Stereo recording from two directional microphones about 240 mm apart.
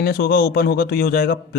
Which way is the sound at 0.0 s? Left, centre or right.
Left.